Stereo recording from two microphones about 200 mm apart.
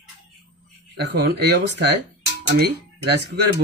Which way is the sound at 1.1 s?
55° right (ahead or behind).